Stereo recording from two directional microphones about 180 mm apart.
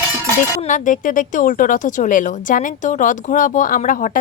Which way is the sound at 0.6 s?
45° left (ahead or behind).